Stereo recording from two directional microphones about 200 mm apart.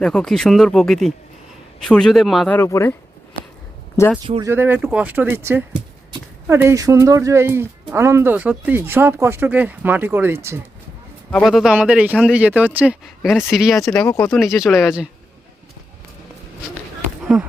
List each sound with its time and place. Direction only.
0.0 s speech: 5° left (ahead or behind)
2.6 s speech: 15° left (ahead or behind)
4.4 s speech: 10° right (ahead or behind)
11.3 s speech: centre (ahead or behind)
17.3 s speech: 5° right (ahead or behind)